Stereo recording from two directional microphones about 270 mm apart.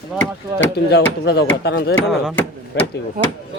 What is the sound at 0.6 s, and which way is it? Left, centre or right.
Speech, left.